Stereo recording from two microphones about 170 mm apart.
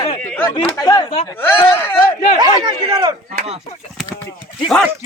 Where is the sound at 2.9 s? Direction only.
25° right (ahead or behind).